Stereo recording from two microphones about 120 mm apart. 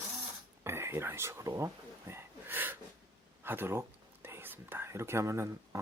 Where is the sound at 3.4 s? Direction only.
20° right (ahead or behind).